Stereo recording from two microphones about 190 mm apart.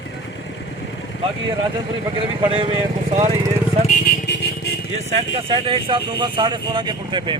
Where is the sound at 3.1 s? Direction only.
35° right (ahead or behind).